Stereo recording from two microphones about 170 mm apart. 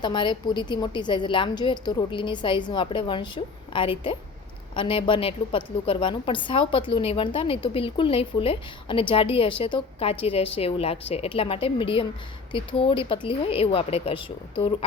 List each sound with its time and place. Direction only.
0.0 s a woman's voice: 25° left (ahead or behind)